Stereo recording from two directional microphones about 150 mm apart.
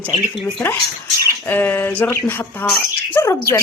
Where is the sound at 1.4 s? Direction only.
15° left (ahead or behind).